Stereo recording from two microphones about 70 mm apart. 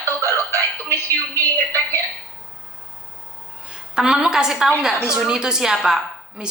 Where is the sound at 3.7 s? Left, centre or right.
Centre.